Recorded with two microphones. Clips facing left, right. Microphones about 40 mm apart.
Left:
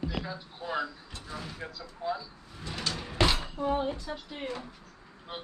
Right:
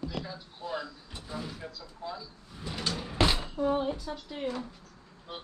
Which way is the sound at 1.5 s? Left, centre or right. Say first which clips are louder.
Left 2 dB; left.